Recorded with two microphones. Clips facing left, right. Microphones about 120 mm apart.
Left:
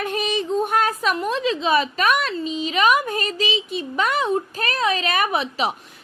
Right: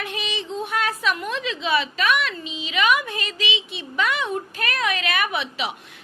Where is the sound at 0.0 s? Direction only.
45° left (ahead or behind).